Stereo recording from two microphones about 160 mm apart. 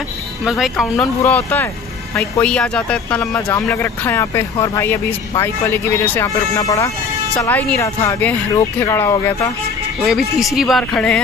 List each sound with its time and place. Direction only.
0.5 s speech: centre (ahead or behind)
1.2 s speech: 10° left (ahead or behind)
9.9 s speech: centre (ahead or behind)